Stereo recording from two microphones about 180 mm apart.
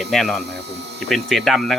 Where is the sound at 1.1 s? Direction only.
Centre (ahead or behind).